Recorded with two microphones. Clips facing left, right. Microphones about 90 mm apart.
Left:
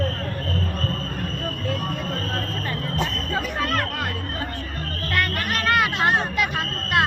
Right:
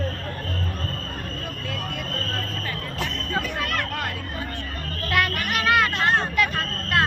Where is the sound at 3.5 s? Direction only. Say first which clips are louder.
Left 3 dB; 35° left (ahead or behind).